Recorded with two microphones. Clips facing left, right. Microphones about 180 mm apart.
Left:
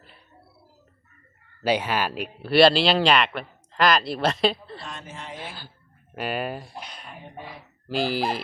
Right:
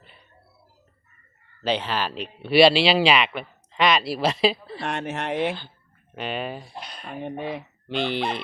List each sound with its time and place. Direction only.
1.6 s speech: 10° left (ahead or behind)
4.8 s speech: 70° right (ahead or behind)
6.1 s speech: 5° left (ahead or behind)
7.0 s speech: 70° right (ahead or behind)
7.9 s speech: 5° left (ahead or behind)